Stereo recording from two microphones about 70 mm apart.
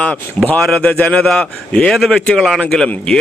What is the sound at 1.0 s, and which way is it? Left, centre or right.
A man's voice, centre.